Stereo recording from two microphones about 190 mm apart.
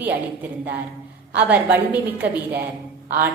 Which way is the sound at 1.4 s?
10° right (ahead or behind).